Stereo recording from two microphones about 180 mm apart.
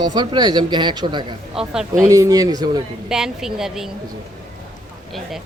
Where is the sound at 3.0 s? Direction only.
5° right (ahead or behind).